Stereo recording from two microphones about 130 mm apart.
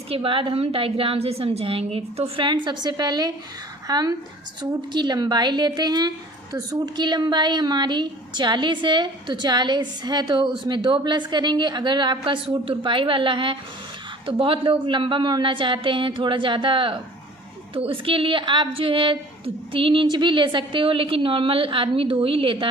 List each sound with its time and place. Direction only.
0.1 s a woman's voice: 45° right (ahead or behind)